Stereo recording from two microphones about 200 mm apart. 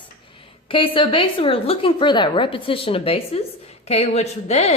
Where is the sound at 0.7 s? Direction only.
25° left (ahead or behind).